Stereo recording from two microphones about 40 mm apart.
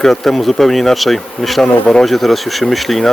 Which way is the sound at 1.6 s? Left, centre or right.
Centre.